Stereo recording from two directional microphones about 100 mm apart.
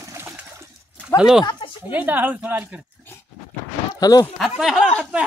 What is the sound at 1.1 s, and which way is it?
Speech, 5° right (ahead or behind).